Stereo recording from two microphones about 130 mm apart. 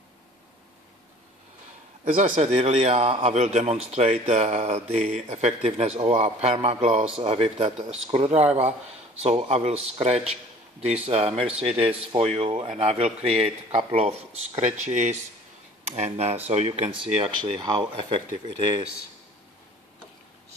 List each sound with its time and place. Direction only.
2.0 s speech: 85° right; by 3.3 s 50° right (ahead or behind)
3.3 s speech: 60° right (ahead or behind); by 18.2 s 40° right (ahead or behind)